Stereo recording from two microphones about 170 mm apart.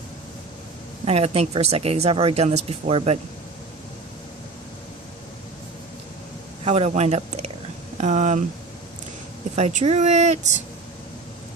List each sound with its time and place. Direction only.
1.0 s a woman's voice: 40° right (ahead or behind)
6.7 s speech: 40° right (ahead or behind)
9.6 s a woman's voice: 40° right (ahead or behind)